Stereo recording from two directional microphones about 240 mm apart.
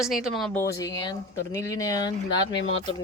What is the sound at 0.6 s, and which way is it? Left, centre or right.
Speech, centre.